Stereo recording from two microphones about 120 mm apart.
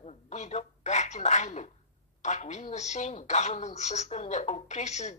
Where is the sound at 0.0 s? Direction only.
70° left (ahead or behind).